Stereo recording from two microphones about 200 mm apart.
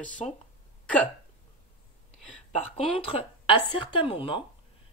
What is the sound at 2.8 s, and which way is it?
Speech, 25° left (ahead or behind).